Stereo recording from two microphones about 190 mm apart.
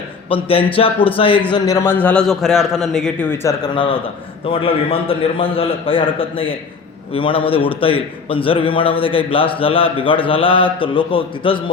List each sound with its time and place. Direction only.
0.3 s a man's voice: 30° left (ahead or behind)